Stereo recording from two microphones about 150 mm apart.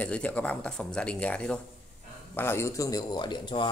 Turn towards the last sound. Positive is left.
turn(degrees=30)  # may be behind; listen again after turning